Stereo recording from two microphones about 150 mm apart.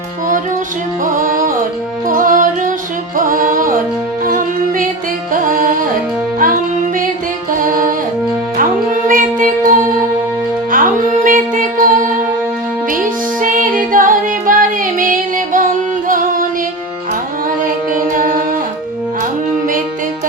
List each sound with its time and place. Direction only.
1.0 s music: 65° right (ahead or behind)
8.5 s music: 60° right (ahead or behind)
17.9 s music: 65° right (ahead or behind)